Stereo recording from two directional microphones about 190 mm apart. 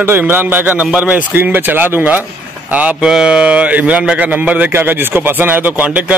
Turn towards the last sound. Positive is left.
turn(degrees=-10)  # may be behind; listen again after turning